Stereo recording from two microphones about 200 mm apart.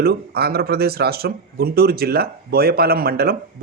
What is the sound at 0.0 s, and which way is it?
Speech, 50° right (ahead or behind).